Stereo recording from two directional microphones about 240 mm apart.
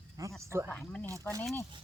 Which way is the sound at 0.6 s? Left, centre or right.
Centre.